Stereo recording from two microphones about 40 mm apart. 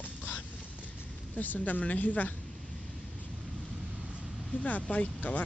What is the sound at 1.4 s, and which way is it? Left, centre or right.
Speech, left.